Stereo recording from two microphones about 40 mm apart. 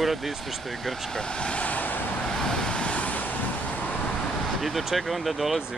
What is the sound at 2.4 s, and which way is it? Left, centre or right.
Vehicle, centre.